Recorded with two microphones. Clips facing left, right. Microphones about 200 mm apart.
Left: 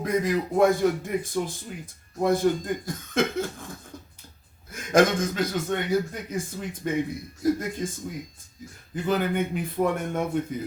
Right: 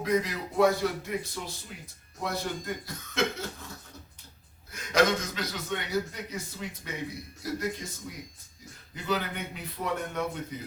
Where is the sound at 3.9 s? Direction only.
50° left (ahead or behind).